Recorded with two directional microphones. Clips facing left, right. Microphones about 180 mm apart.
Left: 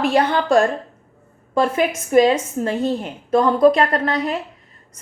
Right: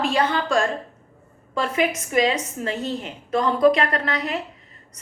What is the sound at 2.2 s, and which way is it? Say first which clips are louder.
A woman's voice: left 7 dB; 50° left (ahead or behind).